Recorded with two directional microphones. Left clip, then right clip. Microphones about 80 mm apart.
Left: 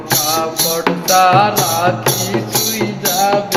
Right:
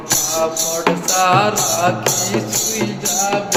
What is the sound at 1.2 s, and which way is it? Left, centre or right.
Music, right.